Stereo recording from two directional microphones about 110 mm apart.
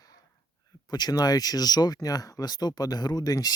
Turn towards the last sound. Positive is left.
turn(degrees=35)  # may be behind; listen again after turning